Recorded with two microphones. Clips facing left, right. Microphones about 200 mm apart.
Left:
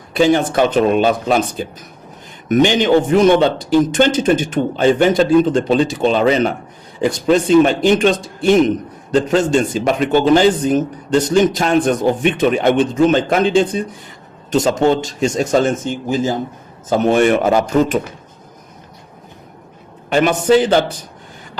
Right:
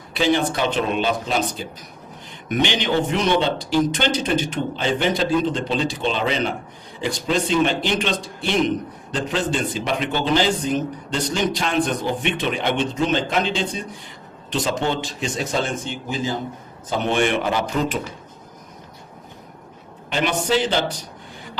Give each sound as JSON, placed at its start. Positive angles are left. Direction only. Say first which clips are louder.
{"t": 0.1, "sound": "a man's voice", "louder": "left 6 dB", "side_deg": 50}
{"t": 20.1, "sound": "a man's voice", "louder": "left 9 dB", "side_deg": 50}